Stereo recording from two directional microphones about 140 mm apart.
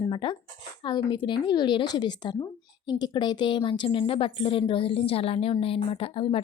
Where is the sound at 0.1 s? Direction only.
35° left (ahead or behind).